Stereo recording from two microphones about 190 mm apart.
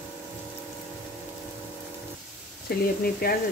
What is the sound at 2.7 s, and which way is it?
Speech, 55° left (ahead or behind).